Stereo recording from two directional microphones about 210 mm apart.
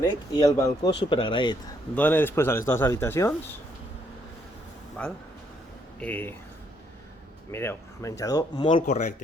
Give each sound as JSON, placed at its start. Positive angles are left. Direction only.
{"t": 0.0, "sound": "speech", "side_deg": 15}
{"t": 2.0, "sound": "speech", "side_deg": 10}
{"t": 5.0, "sound": "speech", "side_deg": 5}
{"t": 7.5, "sound": "speech", "side_deg": 10}